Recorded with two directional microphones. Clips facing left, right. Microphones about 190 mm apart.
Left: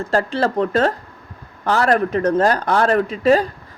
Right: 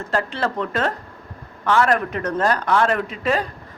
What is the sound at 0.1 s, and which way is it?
A man's voice, 35° left (ahead or behind).